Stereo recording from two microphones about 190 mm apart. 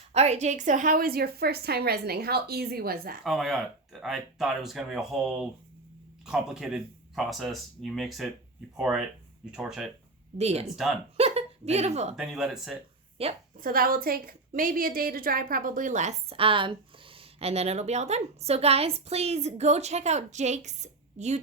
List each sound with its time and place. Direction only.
0.1 s a woman's voice: 35° right (ahead or behind); by 3.2 s 50° right (ahead or behind)
3.2 s speech: centre (ahead or behind)
10.3 s a woman's voice: 35° right (ahead or behind)
11.2 s a sound: 35° right (ahead or behind)
12.1 s speech: centre (ahead or behind)
13.2 s a woman's voice: 30° right (ahead or behind)
13.6 s a woman's voice: 50° right (ahead or behind)